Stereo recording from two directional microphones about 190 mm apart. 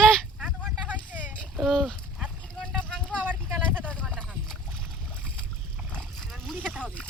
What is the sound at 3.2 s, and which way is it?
Vehicle, 10° right (ahead or behind).